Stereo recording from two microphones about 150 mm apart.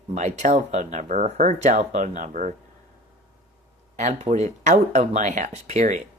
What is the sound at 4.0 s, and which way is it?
Speech, 50° right (ahead or behind).